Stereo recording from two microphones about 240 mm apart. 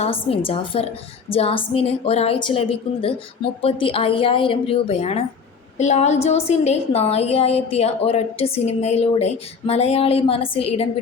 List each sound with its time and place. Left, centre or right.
0.0 s a woman's voice: left